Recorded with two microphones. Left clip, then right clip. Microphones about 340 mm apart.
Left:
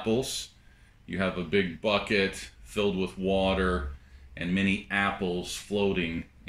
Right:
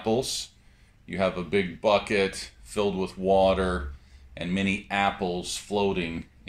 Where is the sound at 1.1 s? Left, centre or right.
Centre.